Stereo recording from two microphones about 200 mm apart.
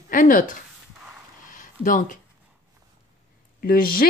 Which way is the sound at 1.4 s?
40° left (ahead or behind).